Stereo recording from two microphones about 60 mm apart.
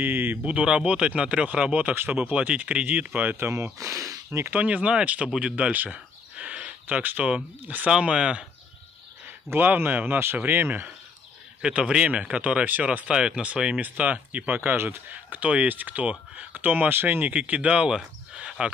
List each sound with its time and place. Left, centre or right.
0.0 s speech: right
0.4 s speech: centre
3.3 s speech: right
4.5 s speech: right
5.4 s a sound: right
7.2 s speech: right
9.5 s speech: right
11.6 s speech: centre
13.1 s speech: centre; by 17.3 s right
17.3 s speech: right